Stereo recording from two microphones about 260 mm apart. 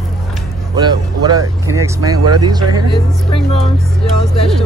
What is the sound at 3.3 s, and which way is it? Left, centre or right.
Speech, left.